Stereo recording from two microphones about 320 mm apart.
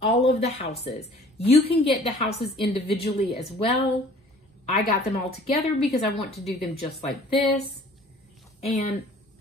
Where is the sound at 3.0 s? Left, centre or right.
Left.